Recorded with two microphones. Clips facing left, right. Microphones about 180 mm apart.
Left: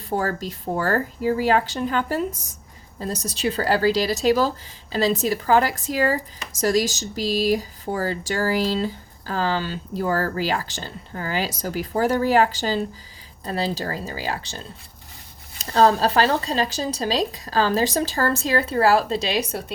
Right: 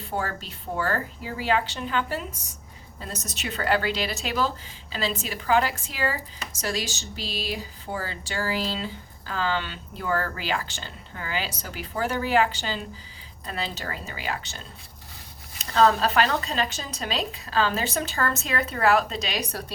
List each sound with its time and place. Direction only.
0.0 s speech: 40° left (ahead or behind)